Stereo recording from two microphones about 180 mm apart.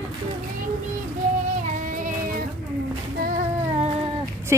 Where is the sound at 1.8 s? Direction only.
50° right (ahead or behind).